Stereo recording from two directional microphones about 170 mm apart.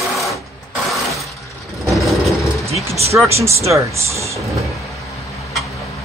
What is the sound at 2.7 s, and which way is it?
Vehicle, 35° right (ahead or behind).